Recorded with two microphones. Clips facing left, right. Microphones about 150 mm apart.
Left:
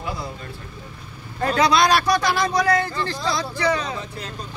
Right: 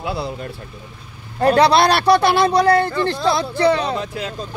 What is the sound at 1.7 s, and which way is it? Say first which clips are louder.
Speech: right 4 dB; 65° right (ahead or behind).